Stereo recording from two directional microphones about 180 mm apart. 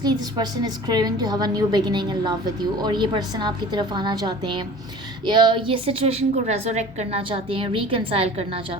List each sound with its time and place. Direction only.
0.0 s a woman's voice: 20° right (ahead or behind)